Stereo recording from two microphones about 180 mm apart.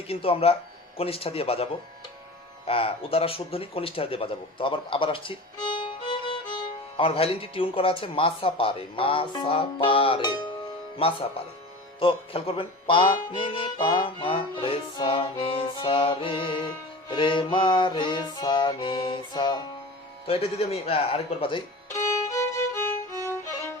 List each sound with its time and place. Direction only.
0.1 s speech: 30° left (ahead or behind)
2.6 s speech: 30° left (ahead or behind)
11.9 s music: 30° left (ahead or behind)
20.2 s speech: 35° left (ahead or behind)
22.3 s music: 15° left (ahead or behind)